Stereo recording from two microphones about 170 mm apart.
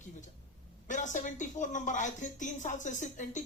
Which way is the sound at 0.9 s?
45° left (ahead or behind).